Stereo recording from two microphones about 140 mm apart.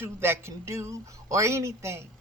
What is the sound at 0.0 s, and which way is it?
Speech, 15° right (ahead or behind).